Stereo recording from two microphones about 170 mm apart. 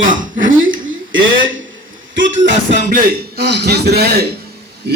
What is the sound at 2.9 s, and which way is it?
A man's voice, 75° right (ahead or behind).